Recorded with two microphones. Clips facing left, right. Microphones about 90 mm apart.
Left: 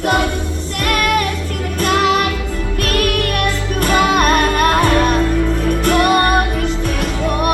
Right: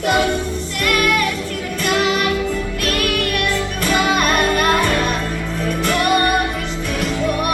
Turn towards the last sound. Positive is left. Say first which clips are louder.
# left 3 dB
turn(degrees=45)  # may be behind; listen again after turning